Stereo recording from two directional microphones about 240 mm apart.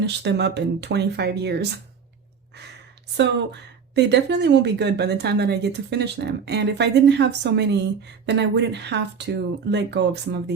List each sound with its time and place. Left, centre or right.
0.0 s speech: right
3.2 s speech: right